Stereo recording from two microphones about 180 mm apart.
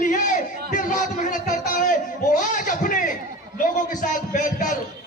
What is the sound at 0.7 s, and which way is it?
Speech, 45° left (ahead or behind).